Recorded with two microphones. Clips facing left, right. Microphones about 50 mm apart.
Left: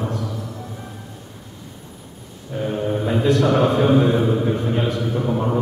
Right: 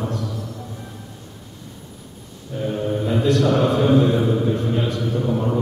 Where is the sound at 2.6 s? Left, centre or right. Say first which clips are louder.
Even; centre.